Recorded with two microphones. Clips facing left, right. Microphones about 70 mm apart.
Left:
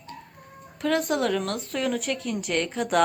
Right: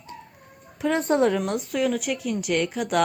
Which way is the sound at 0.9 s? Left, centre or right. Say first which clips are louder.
Right 4 dB; right.